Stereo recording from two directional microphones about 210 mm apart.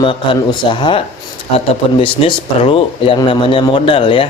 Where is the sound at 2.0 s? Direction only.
25° left (ahead or behind).